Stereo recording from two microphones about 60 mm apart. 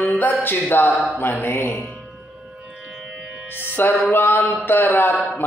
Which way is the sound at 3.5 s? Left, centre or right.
Left.